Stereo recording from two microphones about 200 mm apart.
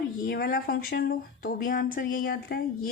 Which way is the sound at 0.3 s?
50° left (ahead or behind).